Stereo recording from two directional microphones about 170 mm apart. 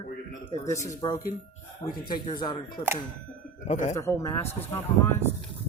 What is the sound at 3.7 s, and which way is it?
Speech, 40° left (ahead or behind).